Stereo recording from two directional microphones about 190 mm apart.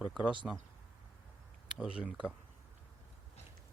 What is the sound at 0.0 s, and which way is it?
Speech, 5° right (ahead or behind).